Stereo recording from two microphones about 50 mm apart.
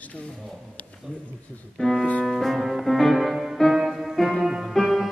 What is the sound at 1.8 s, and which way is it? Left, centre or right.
Speech, centre.